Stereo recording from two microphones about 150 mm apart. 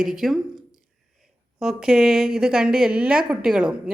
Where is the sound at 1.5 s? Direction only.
5° right (ahead or behind).